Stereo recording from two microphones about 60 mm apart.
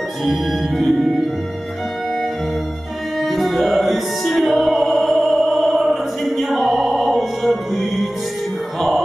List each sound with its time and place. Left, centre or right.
0.2 s music: centre
3.2 s music: centre
5.6 s opera: centre
6.7 s music: centre